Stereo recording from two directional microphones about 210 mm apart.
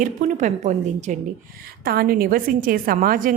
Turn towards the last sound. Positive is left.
turn(degrees=-40)  # may be behind; listen again after turning